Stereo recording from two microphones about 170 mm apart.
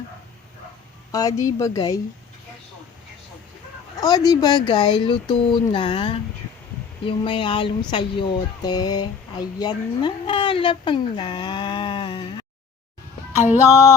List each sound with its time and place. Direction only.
1.1 s speech: 20° left (ahead or behind)
3.9 s speech: 20° left (ahead or behind)
13.4 s a sound: 10° right (ahead or behind)